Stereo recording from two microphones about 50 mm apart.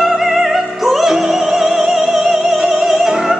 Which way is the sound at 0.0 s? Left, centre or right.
Centre.